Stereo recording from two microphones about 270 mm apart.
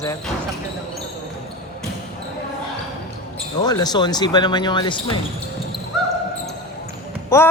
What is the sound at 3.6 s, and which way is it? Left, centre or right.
Speech, centre.